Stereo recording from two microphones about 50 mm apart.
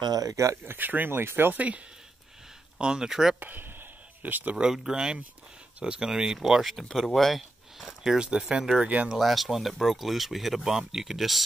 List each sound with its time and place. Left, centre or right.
0.7 s speech: right
1.5 s speech: right
2.8 s speech: centre
3.3 s speech: right
4.6 s speech: centre
8.2 s speech: centre
8.8 s speech: right
9.2 s speech: centre